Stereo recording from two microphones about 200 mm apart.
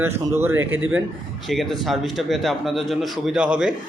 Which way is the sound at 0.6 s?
75° right (ahead or behind).